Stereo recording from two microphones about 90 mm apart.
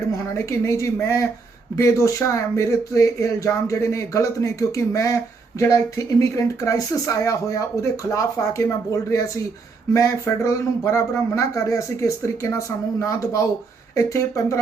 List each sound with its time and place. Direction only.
0.3 s speech: 35° left (ahead or behind)